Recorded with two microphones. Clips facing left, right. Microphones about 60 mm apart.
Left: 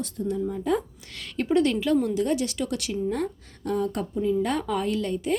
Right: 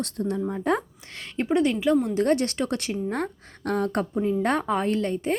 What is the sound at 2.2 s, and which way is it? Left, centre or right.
A woman's voice, right.